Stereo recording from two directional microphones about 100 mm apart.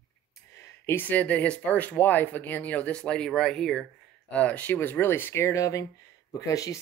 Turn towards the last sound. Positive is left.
turn(degrees=35)  # may be behind; listen again after turning